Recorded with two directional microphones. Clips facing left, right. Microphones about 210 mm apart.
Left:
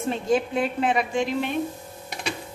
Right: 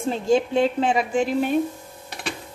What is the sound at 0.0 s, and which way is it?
A woman's voice, 30° right (ahead or behind).